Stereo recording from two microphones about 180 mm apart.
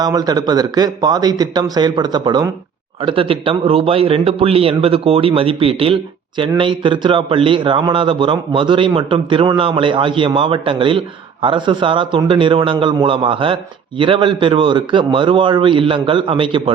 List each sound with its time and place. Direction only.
0.0 s a man's voice: 20° right (ahead or behind)